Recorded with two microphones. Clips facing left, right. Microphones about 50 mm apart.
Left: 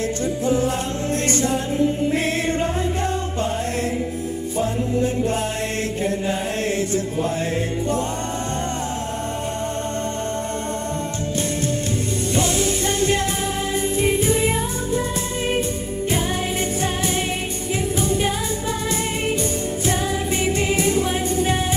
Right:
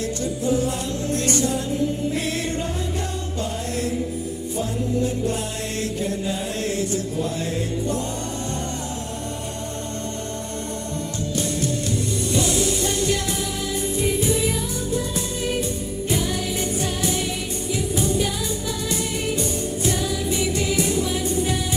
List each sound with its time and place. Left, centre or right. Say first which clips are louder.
0.4 s music: left 1 dB; left
4.5 s music: left 2 dB; left
6.7 s chant: left 2 dB; left
12.3 s music: left 1 dB; left
17.9 s music: even; left
20.3 s music: left 2 dB; left